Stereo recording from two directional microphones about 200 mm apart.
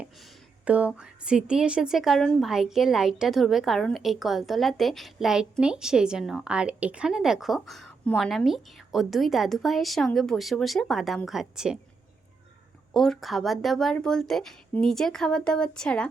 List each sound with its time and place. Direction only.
0.0 s speech: 5° right (ahead or behind)
12.9 s speech: centre (ahead or behind)